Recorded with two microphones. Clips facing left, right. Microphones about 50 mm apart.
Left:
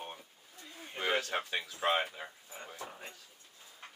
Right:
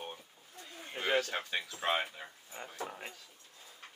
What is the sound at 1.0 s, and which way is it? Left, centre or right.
Speech, centre.